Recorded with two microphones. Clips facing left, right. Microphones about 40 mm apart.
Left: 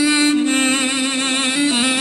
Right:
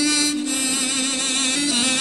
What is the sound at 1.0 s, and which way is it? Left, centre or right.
Music, left.